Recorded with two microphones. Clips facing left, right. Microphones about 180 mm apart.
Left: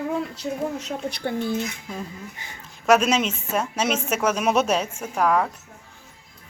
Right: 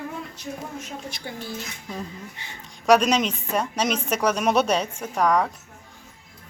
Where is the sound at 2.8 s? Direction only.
5° left (ahead or behind).